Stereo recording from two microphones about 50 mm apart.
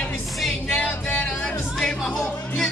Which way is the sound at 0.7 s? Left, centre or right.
Centre.